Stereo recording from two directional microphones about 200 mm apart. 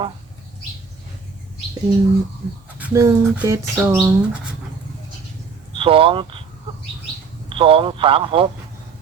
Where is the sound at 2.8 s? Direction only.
10° right (ahead or behind).